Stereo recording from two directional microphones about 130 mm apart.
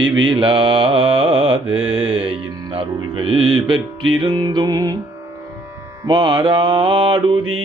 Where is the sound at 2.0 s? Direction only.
40° right (ahead or behind).